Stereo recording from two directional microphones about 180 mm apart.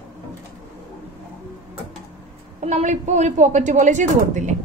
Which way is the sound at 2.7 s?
40° right (ahead or behind).